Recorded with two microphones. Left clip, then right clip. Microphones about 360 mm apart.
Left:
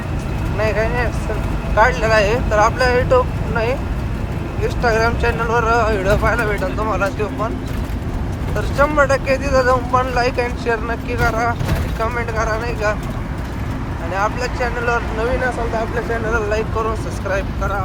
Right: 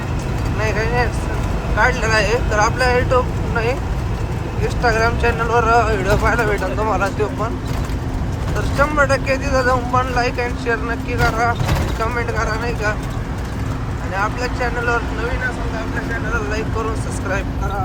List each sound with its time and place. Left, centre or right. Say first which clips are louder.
0.6 s speech: left 1 dB; centre
8.8 s speech: left 1 dB; centre
14.2 s speech: left 1 dB; centre
16.3 s speech: left 3 dB; centre